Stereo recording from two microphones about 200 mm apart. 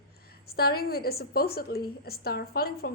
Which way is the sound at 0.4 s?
50° left (ahead or behind).